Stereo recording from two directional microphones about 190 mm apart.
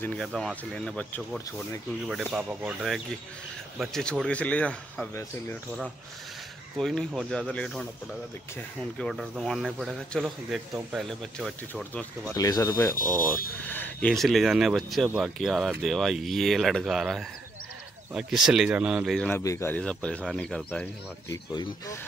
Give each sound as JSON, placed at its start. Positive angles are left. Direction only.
{"t": 0.0, "sound": "speech", "side_deg": 5}
{"t": 6.8, "sound": "speech", "side_deg": 0}
{"t": 12.4, "sound": "speech", "side_deg": 20}
{"t": 13.7, "sound": "a sound", "side_deg": 10}
{"t": 14.0, "sound": "speech", "side_deg": 0}